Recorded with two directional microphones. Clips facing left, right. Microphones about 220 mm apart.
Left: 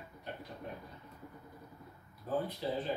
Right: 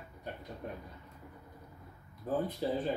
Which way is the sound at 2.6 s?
45° right (ahead or behind).